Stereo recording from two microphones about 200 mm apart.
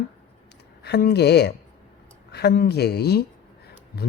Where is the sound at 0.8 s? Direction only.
55° left (ahead or behind).